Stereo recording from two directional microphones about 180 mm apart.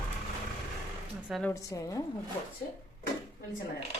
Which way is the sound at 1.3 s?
5° left (ahead or behind).